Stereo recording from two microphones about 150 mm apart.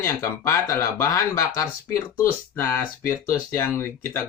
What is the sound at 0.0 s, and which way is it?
Speech, 15° left (ahead or behind).